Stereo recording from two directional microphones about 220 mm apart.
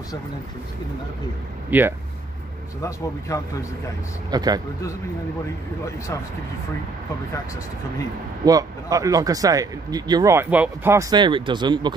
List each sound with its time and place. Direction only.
1.7 s speech: 10° right (ahead or behind)
3.3 s speech: 15° left (ahead or behind)
4.3 s speech: 20° right (ahead or behind)
8.5 s speech: 15° right (ahead or behind)